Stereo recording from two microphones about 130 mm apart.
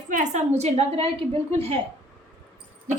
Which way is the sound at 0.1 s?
65° right (ahead or behind).